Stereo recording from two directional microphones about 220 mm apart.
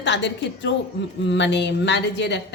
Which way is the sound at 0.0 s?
55° left (ahead or behind).